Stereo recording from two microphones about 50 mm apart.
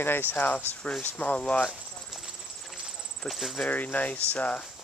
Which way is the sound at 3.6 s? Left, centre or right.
Left.